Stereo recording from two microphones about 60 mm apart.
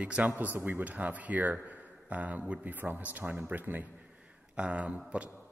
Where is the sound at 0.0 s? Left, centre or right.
Right.